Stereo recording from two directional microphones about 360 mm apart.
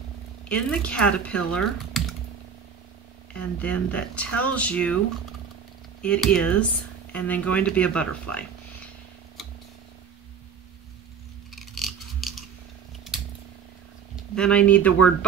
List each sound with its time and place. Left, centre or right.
0.5 s speech: centre
3.3 s speech: centre
6.0 s speech: centre
11.5 s a sound: centre
14.3 s speech: centre